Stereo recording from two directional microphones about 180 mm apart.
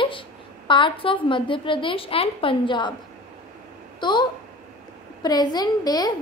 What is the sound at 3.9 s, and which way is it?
A woman's voice, 25° left (ahead or behind).